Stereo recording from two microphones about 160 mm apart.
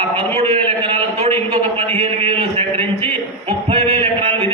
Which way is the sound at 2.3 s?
35° right (ahead or behind).